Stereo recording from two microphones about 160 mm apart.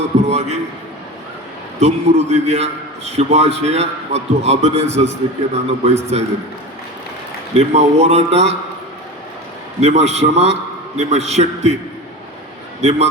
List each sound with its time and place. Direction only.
0.3 s a man's voice: 45° right (ahead or behind)
1.8 s a man's voice: 40° right (ahead or behind)
7.5 s a man's voice: 40° right (ahead or behind)
9.8 s a man's voice: 45° right (ahead or behind)
12.8 s a man's voice: 40° right (ahead or behind)